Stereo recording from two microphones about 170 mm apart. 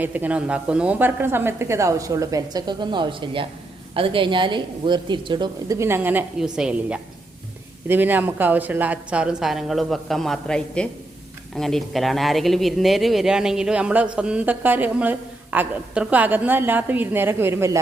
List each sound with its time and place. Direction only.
0.0 s a woman's voice: 10° right (ahead or behind)